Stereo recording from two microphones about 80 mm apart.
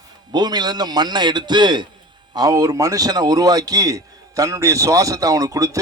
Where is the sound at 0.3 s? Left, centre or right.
Right.